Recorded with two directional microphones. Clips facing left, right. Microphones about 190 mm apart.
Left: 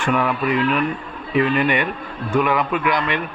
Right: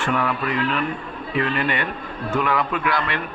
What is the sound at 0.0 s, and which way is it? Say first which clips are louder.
A man's voice: left 3 dB; 15° left (ahead or behind).